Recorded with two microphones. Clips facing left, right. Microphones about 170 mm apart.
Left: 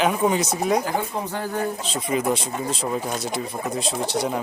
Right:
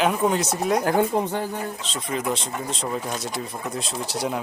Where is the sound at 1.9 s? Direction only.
5° left (ahead or behind).